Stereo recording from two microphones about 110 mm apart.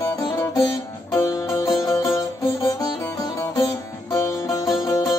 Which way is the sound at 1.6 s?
35° left (ahead or behind).